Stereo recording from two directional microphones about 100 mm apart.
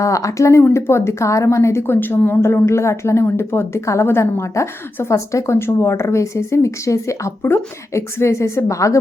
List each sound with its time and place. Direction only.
0.0 s speech: 35° left (ahead or behind)